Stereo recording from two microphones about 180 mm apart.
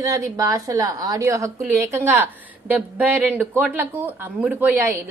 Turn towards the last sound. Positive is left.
turn(degrees=-10)  # may be behind; listen again after turning